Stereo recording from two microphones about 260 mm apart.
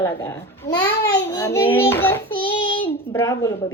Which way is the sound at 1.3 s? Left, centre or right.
Centre.